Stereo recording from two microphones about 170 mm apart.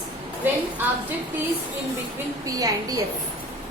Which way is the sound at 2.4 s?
20° right (ahead or behind).